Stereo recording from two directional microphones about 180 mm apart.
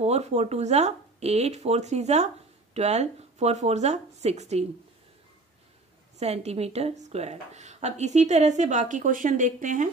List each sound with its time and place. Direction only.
0.0 s speech: 35° right (ahead or behind)
6.1 s speech: 35° right (ahead or behind)